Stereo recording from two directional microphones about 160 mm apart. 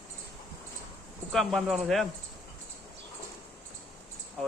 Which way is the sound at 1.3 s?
Centre (ahead or behind).